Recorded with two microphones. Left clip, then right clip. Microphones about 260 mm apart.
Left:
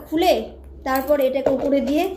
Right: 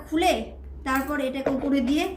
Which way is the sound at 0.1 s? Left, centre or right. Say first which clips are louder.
Left 5 dB; centre.